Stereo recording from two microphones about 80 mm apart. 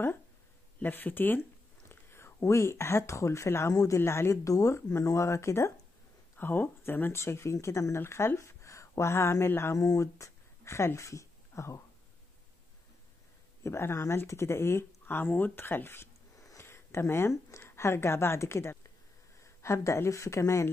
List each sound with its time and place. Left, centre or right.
0.8 s speech: left
6.3 s speech: left
13.7 s speech: left
16.3 s a sound: left
16.6 s speech: left